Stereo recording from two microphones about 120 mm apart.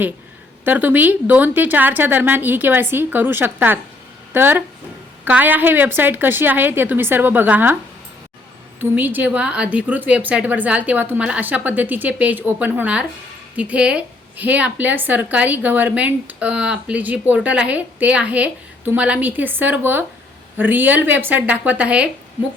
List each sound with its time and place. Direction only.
0.6 s a woman's voice: 15° right (ahead or behind)
8.8 s a woman's voice: 15° right (ahead or behind)